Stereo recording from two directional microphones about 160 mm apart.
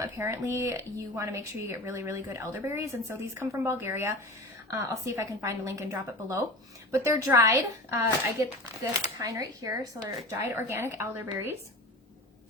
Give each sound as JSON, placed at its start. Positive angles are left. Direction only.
{"t": 0.0, "sound": "speech", "side_deg": -15}